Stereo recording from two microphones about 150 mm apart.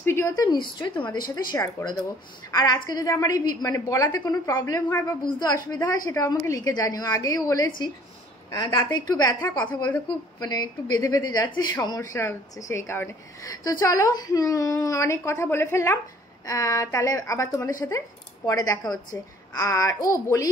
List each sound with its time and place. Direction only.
0.0 s a sound: 15° left (ahead or behind)
0.3 s a woman's voice: 30° left (ahead or behind)
4.8 s a woman's voice: 10° left (ahead or behind)
5.2 s a woman's voice: 25° left (ahead or behind)
10.4 s a woman's voice: 25° left (ahead or behind)